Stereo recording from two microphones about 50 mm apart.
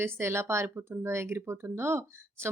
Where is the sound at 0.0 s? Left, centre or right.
Right.